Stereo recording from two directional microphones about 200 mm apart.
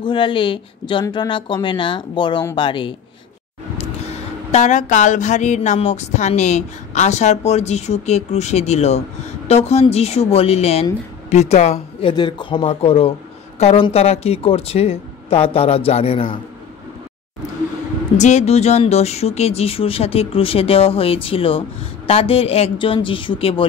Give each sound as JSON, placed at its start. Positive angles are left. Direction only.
{"t": 0.0, "sound": "speech", "side_deg": 25}
{"t": 18.1, "sound": "speech", "side_deg": 35}